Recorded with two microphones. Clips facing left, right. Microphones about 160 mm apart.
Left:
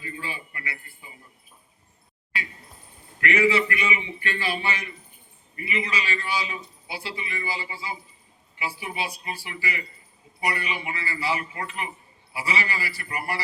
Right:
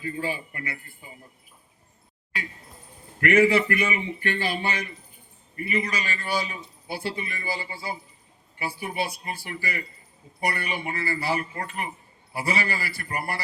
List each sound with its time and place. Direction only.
0.2 s a man's voice: 45° right (ahead or behind)
3.2 s a man's voice: 50° right (ahead or behind)